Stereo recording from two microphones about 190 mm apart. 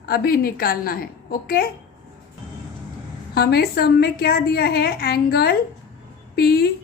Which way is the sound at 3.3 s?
55° left (ahead or behind).